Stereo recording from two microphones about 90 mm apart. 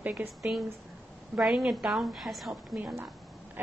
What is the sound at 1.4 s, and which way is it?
A woman's voice, 5° right (ahead or behind).